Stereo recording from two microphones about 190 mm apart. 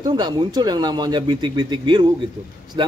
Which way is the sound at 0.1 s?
25° right (ahead or behind).